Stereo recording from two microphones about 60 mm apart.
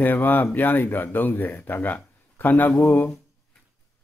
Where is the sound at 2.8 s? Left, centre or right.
Left.